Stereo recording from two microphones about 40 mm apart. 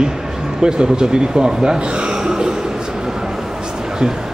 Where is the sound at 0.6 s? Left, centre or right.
Right.